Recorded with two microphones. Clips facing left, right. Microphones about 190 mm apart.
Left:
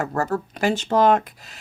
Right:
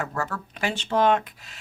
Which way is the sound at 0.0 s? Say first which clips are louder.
Left 6 dB; 40° left (ahead or behind).